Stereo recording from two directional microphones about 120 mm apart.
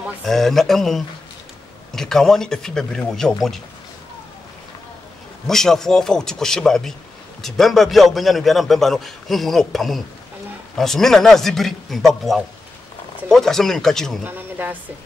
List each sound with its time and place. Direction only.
0.2 s a man's voice: 5° left (ahead or behind)
5.5 s a man's voice: 5° left (ahead or behind)
14.2 s speech: 15° right (ahead or behind)